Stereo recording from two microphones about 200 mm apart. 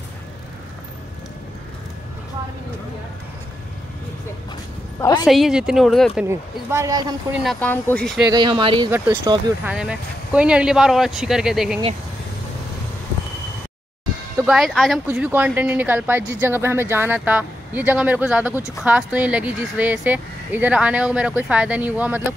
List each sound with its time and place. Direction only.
5.2 s speech: centre (ahead or behind)
6.2 s speech: 15° right (ahead or behind)
7.6 s speech: 10° left (ahead or behind)
8.3 s speech: 25° right (ahead or behind)
9.7 s speech: 5° right (ahead or behind)
14.3 s speech: 5° right (ahead or behind)